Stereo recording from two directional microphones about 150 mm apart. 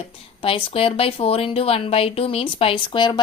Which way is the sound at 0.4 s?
35° left (ahead or behind).